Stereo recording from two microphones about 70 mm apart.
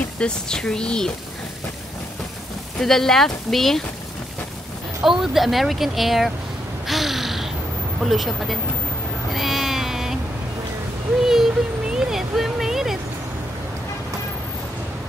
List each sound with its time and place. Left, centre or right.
0.2 s speech: centre
2.8 s speech: centre
5.0 s speech: centre
6.9 s a sound: centre
8.0 s speech: centre
9.3 s cat: centre
11.1 s a sound: centre